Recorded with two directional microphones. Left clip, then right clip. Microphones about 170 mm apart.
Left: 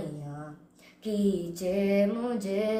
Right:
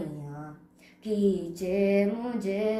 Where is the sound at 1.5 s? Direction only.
15° left (ahead or behind).